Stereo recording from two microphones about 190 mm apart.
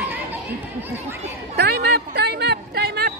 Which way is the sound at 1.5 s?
60° right (ahead or behind).